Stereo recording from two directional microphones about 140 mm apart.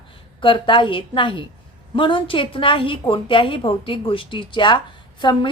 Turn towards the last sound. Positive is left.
turn(degrees=35)  # may be behind; listen again after turning